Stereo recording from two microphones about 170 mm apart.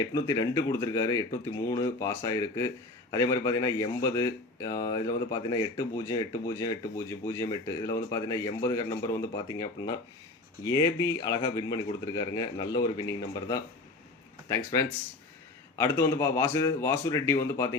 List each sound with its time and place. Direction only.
0.0 s speech: 20° left (ahead or behind)